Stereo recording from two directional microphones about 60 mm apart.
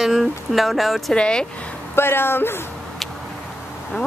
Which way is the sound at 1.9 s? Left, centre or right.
Left.